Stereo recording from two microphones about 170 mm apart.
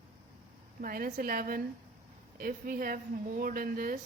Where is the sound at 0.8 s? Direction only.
55° right (ahead or behind).